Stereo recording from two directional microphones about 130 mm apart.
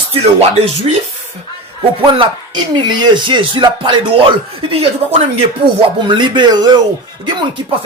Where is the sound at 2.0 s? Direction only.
40° right (ahead or behind).